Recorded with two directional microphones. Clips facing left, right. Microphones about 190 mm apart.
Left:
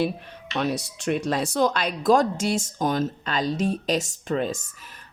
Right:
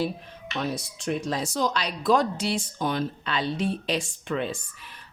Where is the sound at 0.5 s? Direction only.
70° left (ahead or behind); by 4.6 s 40° left (ahead or behind).